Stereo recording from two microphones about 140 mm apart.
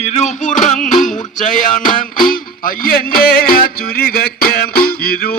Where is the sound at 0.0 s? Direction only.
55° left (ahead or behind).